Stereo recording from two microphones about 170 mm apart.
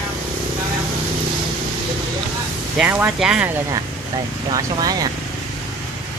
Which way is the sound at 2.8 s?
10° right (ahead or behind).